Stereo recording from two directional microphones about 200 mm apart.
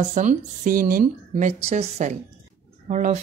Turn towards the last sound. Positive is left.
turn(degrees=-35)  # may be behind; listen again after turning